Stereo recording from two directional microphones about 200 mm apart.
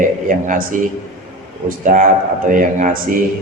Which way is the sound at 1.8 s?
40° right (ahead or behind).